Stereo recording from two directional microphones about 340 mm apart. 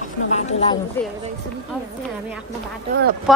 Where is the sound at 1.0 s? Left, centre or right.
Centre.